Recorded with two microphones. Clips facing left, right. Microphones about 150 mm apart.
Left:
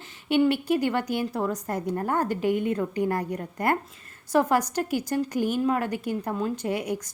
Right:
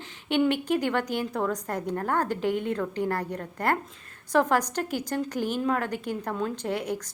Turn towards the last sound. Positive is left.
turn(degrees=10)  # may be behind; listen again after turning